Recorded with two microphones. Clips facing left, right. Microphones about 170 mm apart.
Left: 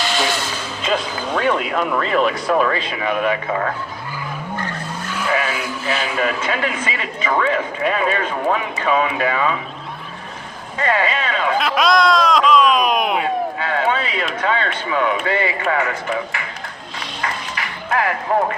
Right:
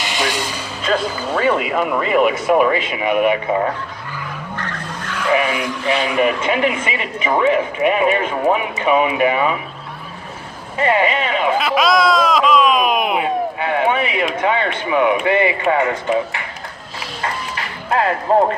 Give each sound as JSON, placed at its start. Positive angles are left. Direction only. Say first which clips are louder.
{"t": 0.0, "sound": "a sound", "louder": "left 1 dB", "side_deg": -15}
{"t": 1.2, "sound": "speech", "louder": "right 2 dB", "side_deg": -5}
{"t": 4.5, "sound": "skidding", "louder": "left 1 dB", "side_deg": 10}
{"t": 5.5, "sound": "speech", "louder": "right 4 dB", "side_deg": 5}
{"t": 6.1, "sound": "speech", "louder": "right 4 dB", "side_deg": -20}
{"t": 10.8, "sound": "speech", "louder": "right 3 dB", "side_deg": -20}
{"t": 11.6, "sound": "a sound", "louder": "left 1 dB", "side_deg": 0}
{"t": 13.6, "sound": "speech", "louder": "right 3 dB", "side_deg": -20}
{"t": 17.5, "sound": "music", "louder": "right 2 dB", "side_deg": -30}
{"t": 18.3, "sound": "speech", "louder": "right 5 dB", "side_deg": -30}